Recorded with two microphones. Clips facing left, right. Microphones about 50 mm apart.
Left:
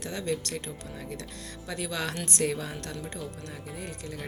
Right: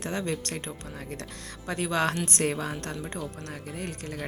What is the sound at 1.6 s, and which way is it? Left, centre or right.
Speech, right.